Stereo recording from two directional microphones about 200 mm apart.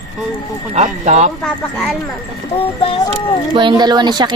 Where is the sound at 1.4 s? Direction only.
Centre (ahead or behind).